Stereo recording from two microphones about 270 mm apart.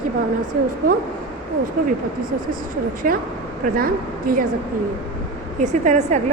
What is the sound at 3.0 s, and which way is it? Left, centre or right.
A woman's voice, right.